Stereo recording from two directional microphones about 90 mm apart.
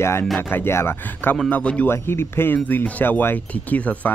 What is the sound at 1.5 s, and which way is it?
Speech, 15° left (ahead or behind).